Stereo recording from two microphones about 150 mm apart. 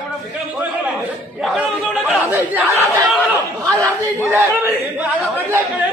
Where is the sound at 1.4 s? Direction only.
Centre (ahead or behind).